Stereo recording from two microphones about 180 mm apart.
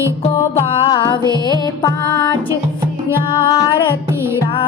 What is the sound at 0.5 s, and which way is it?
Music, 20° left (ahead or behind).